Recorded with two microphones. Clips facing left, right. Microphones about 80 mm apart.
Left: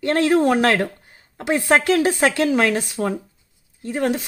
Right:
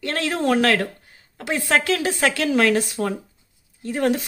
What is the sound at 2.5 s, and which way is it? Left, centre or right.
Speech, centre.